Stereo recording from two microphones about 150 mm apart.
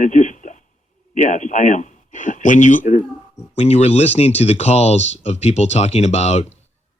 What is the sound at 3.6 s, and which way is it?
Speech, 45° left (ahead or behind).